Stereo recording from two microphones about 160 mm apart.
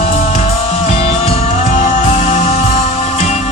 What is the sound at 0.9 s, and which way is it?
Music, 40° left (ahead or behind).